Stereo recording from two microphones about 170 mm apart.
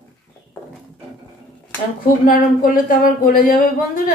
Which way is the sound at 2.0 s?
55° left (ahead or behind).